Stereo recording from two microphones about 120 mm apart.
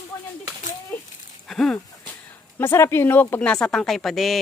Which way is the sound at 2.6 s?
20° left (ahead or behind).